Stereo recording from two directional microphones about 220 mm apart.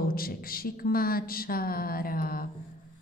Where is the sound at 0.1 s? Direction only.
40° left (ahead or behind).